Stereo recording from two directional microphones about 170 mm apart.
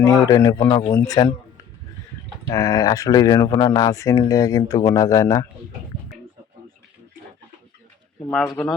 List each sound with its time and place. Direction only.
0.0 s speech: 20° left (ahead or behind)
2.5 s speech: 20° left (ahead or behind)